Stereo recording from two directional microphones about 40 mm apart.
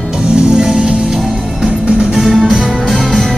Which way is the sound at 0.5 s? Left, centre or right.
Centre.